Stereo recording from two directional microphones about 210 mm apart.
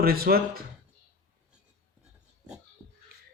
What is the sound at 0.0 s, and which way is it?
Speech, 45° right (ahead or behind).